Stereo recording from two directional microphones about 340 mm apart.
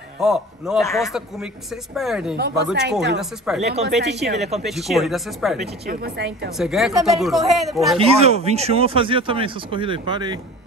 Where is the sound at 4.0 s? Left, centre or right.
Right.